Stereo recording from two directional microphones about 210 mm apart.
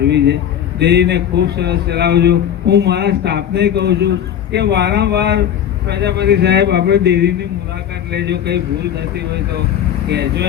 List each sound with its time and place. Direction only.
0.0 s a man's voice: 55° right (ahead or behind)